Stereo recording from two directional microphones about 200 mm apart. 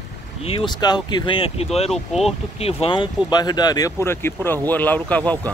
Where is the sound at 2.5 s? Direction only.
30° left (ahead or behind).